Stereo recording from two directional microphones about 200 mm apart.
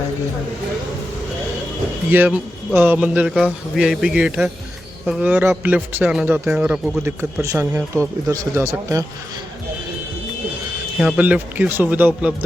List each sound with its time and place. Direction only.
2.0 s a man's voice: 10° right (ahead or behind)
11.0 s speech: 5° right (ahead or behind)